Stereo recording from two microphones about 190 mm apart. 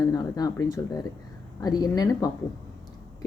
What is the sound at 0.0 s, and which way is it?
Speech, 20° left (ahead or behind).